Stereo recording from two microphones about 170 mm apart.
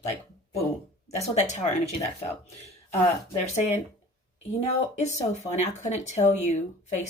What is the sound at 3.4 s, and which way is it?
Speech, 40° left (ahead or behind).